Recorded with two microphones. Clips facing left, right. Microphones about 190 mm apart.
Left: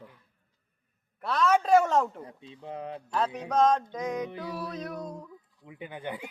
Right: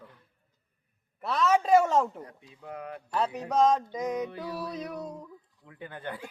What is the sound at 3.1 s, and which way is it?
Speech, 5° right (ahead or behind).